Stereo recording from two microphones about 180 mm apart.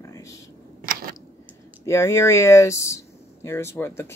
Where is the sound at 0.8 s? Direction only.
55° right (ahead or behind).